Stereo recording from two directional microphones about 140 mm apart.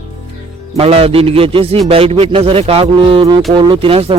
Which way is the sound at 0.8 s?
45° right (ahead or behind).